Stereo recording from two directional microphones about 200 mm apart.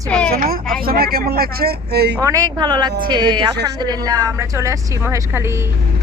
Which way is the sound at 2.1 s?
15° right (ahead or behind).